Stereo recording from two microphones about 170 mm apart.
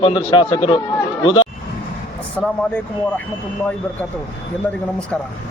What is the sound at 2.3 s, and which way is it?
Speech, 10° left (ahead or behind).